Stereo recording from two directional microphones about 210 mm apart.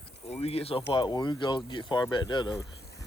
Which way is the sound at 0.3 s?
30° left (ahead or behind).